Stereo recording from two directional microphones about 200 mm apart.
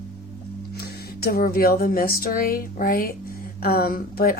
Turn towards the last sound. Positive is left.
turn(degrees=45)  # may be behind; listen again after turning